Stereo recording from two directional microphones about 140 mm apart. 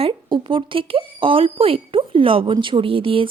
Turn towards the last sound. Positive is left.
turn(degrees=-40)  # may be behind; listen again after turning